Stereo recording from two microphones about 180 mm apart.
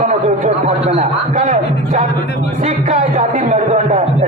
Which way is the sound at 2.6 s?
35° right (ahead or behind).